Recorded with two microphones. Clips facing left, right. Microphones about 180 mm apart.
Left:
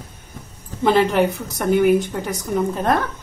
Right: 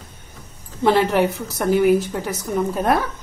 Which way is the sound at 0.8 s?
Centre (ahead or behind).